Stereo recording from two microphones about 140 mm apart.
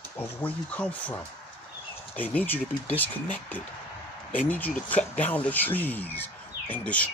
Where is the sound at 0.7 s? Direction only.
10° left (ahead or behind).